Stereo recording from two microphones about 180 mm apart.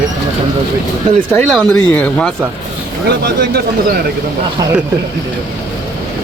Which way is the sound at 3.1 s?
60° right (ahead or behind).